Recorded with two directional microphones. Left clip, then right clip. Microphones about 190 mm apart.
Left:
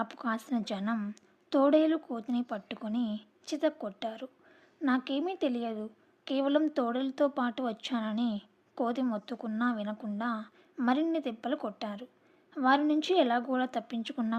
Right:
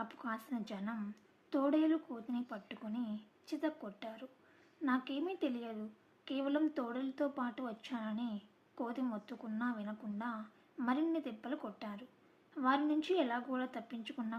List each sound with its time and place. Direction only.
0.0 s a woman's voice: 45° left (ahead or behind)